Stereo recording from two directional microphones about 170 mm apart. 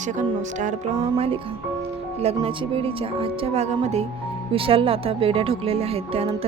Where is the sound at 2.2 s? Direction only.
35° right (ahead or behind).